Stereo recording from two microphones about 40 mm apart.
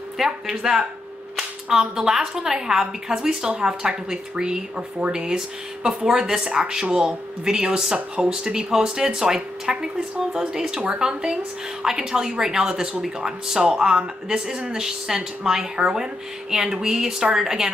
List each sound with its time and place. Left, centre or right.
0.2 s speech: centre